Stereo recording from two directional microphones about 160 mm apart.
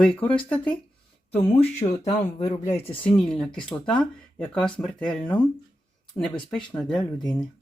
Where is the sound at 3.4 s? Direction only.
5° left (ahead or behind).